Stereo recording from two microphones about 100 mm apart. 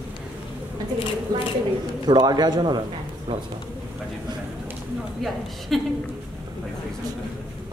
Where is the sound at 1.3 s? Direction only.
40° right (ahead or behind).